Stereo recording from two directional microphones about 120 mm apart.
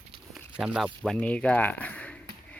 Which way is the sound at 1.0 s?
10° left (ahead or behind).